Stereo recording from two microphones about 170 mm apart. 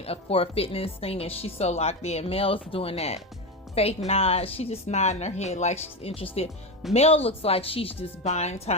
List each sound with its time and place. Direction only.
0.0 s speech: 35° left (ahead or behind)